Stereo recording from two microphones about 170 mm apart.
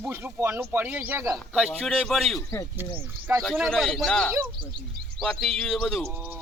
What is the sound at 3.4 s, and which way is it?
A man's voice, centre (ahead or behind).